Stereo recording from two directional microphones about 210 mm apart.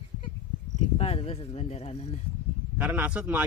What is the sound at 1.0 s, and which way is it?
Speech, 30° left (ahead or behind).